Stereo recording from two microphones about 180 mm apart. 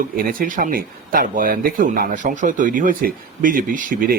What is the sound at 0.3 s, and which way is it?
Speech, 50° right (ahead or behind).